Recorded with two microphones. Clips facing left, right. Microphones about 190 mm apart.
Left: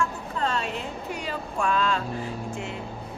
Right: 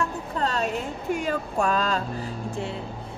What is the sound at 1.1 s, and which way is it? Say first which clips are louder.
A woman's voice: right 7 dB; 50° right (ahead or behind).